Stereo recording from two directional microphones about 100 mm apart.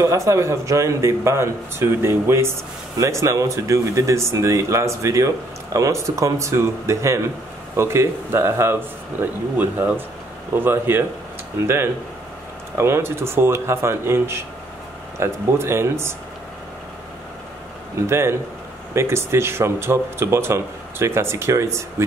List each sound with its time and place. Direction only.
0.0 s speech: 30° right (ahead or behind)
18.0 s speech: 25° right (ahead or behind)